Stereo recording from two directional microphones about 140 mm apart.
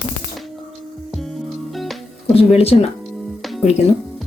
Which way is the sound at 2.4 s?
45° left (ahead or behind).